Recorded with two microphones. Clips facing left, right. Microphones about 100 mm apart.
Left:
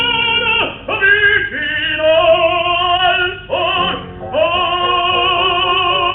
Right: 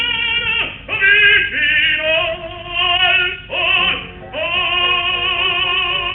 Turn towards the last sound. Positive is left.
turn(degrees=40)  # may be behind; listen again after turning